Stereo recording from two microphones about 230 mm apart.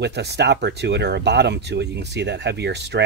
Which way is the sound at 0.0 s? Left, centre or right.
Right.